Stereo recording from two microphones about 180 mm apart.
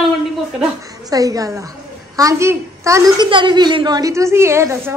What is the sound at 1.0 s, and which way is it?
A woman's voice, 20° right (ahead or behind).